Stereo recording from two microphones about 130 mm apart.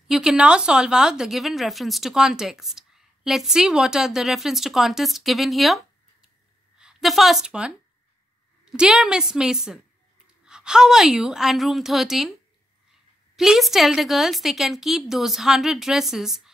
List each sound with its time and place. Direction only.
0.1 s a woman's voice: 5° right (ahead or behind)
6.8 s a woman's voice: 5° right (ahead or behind)
13.4 s a woman's voice: centre (ahead or behind)